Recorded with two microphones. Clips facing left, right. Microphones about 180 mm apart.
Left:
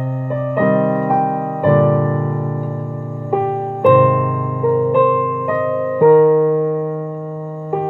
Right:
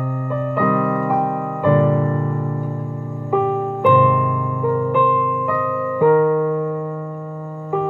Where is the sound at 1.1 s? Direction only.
55° left (ahead or behind).